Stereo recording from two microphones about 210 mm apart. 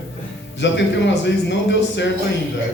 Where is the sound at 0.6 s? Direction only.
55° left (ahead or behind).